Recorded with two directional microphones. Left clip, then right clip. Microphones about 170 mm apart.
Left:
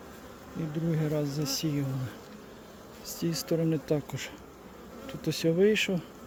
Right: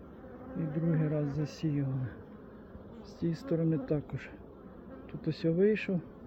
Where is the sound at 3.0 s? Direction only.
25° left (ahead or behind).